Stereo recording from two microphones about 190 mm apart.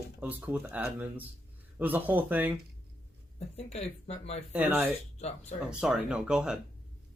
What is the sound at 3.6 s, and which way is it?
Speech, 35° left (ahead or behind).